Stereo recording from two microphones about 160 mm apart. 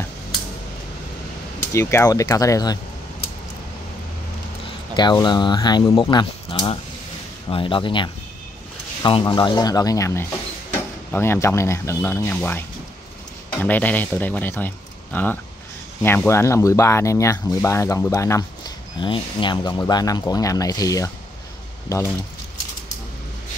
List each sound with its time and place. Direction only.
1.7 s speech: 15° left (ahead or behind)
4.9 s speech: 30° left (ahead or behind); by 14.7 s 10° left (ahead or behind)
16.0 s speech: 15° left (ahead or behind)
18.9 s speech: 30° left (ahead or behind)